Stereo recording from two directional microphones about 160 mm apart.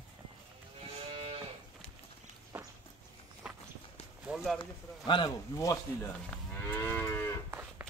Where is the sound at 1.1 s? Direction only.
40° right (ahead or behind).